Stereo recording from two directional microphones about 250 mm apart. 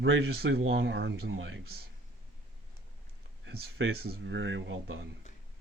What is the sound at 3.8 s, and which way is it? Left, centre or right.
Speech, right.